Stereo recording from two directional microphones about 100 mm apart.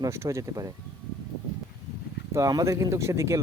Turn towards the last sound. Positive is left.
turn(degrees=-30)  # may be behind; listen again after turning